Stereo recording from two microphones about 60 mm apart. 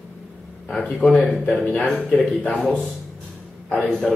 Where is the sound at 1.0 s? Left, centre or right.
Centre.